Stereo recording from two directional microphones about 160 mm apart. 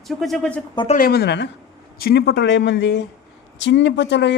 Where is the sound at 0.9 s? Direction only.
75° left (ahead or behind); by 1.4 s 90° left.